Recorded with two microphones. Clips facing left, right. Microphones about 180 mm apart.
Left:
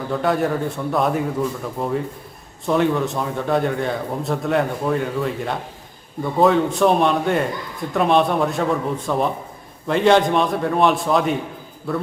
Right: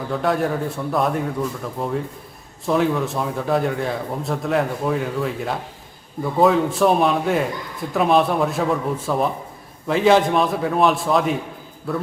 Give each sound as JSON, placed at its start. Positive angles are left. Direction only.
{"t": 0.1, "sound": "a man's voice", "side_deg": 0}